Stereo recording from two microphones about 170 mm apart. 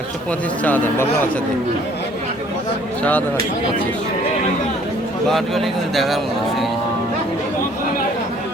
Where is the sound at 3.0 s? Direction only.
10° left (ahead or behind).